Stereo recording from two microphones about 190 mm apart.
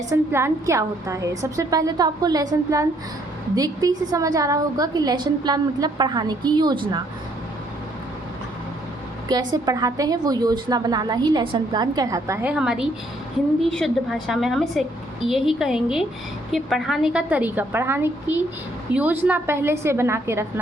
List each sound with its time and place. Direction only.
0.1 s a woman's voice: 15° right (ahead or behind)
9.3 s a woman's voice: 20° right (ahead or behind)